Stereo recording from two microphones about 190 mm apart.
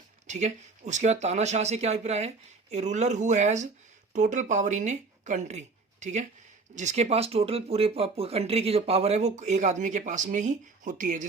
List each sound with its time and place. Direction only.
0.3 s speech: 40° right (ahead or behind)